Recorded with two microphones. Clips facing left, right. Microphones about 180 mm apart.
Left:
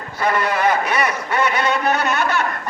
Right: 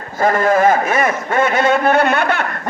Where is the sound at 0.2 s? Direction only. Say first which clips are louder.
Right 6 dB; 45° right (ahead or behind).